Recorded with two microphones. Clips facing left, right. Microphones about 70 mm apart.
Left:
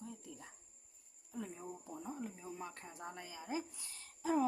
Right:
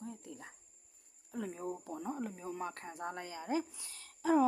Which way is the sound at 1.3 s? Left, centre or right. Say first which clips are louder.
Right 6 dB; right.